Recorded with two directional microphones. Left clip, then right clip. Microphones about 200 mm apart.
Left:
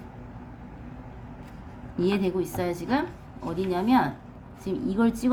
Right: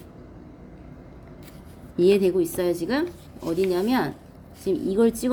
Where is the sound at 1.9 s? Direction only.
25° right (ahead or behind).